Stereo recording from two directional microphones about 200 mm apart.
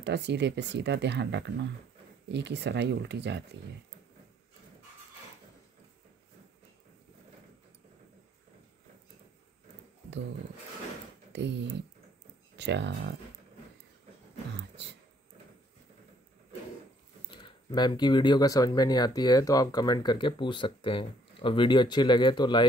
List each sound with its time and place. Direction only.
0.0 s speech: 60° right (ahead or behind)
11.3 s speech: 60° right (ahead or behind)
17.3 s speech: 25° left (ahead or behind)